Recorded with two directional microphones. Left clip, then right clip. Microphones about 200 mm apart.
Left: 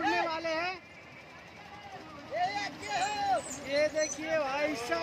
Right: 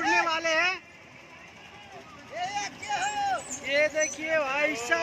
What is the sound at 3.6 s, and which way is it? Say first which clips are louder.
Speech: right 7 dB; centre (ahead or behind).